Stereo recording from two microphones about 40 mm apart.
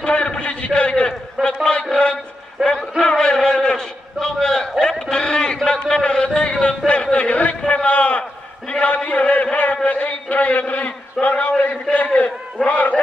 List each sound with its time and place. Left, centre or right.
0.0 s a man's voice: left
2.6 s a man's voice: centre
3.1 s a man's voice: centre; by 13.0 s left